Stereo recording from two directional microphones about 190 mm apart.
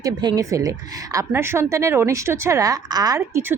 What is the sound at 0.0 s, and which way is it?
A woman's voice, 20° right (ahead or behind).